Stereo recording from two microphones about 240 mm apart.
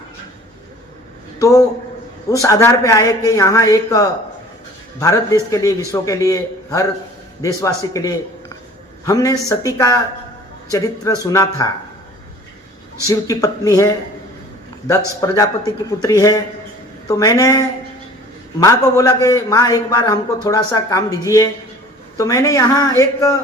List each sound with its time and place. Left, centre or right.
1.4 s a man's voice: centre
13.1 s a man's voice: centre
15.2 s a man's voice: centre
18.6 s a man's voice: centre